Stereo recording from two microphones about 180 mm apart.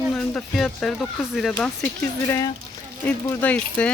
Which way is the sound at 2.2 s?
15° left (ahead or behind).